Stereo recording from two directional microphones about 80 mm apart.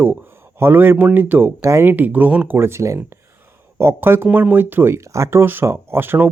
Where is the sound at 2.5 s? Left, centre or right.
Right.